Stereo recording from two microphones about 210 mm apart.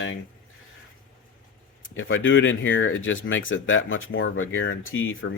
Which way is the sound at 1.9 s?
70° left (ahead or behind).